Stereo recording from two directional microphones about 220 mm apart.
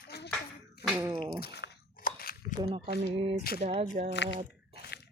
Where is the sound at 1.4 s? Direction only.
45° left (ahead or behind).